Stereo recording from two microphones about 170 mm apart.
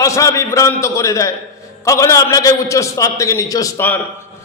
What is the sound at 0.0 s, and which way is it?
A man's voice, 20° left (ahead or behind).